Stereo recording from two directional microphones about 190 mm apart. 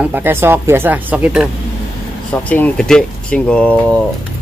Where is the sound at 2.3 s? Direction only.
5° left (ahead or behind).